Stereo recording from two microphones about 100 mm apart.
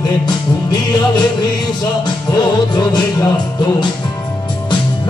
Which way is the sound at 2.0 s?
45° left (ahead or behind).